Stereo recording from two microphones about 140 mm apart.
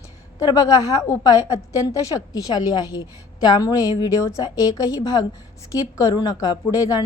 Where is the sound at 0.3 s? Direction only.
25° left (ahead or behind).